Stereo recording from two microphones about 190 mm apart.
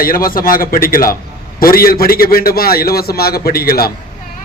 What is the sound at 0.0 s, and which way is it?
A man's voice, 50° left (ahead or behind).